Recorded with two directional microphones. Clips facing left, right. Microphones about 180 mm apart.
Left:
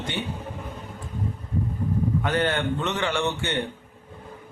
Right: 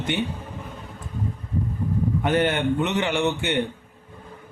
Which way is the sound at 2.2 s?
20° right (ahead or behind).